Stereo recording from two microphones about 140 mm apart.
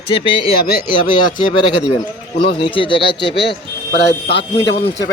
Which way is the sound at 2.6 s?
40° left (ahead or behind).